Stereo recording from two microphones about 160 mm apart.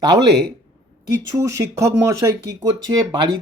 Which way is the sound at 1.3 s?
20° right (ahead or behind).